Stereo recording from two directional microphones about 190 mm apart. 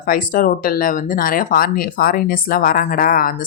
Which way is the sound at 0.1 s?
50° left (ahead or behind).